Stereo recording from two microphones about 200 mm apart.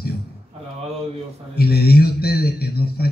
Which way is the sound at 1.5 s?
50° left (ahead or behind).